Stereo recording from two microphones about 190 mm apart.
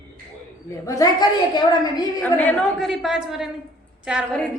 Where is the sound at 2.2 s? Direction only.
10° left (ahead or behind).